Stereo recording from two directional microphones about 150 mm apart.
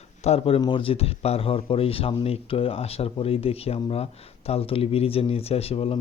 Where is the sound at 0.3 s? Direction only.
40° left (ahead or behind).